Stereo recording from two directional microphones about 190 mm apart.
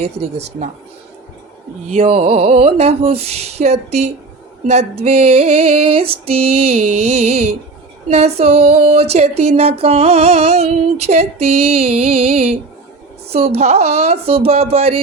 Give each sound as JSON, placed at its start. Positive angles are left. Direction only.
{"t": 0.0, "sound": "music", "side_deg": -35}
{"t": 1.9, "sound": "music", "side_deg": -30}